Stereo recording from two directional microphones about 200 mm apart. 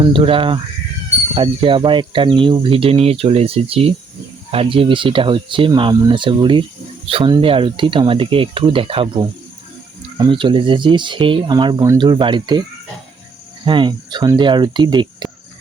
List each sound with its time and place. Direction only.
0.0 s speech: 25° right (ahead or behind)
13.7 s speech: 25° right (ahead or behind)